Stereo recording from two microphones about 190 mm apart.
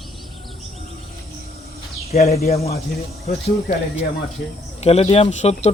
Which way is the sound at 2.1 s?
35° left (ahead or behind).